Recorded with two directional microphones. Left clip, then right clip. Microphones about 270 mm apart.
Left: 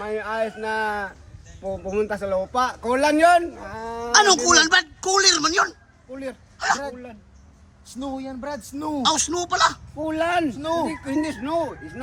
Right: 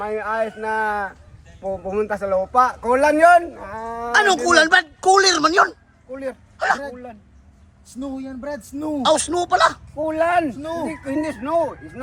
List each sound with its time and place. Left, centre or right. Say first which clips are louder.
0.0 s a man's voice: right 3 dB; centre
7.9 s a man's voice: even; centre
8.3 s speech: right 2 dB; centre